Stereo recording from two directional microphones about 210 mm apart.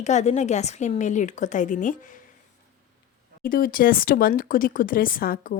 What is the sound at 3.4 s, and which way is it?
Speech, 45° left (ahead or behind).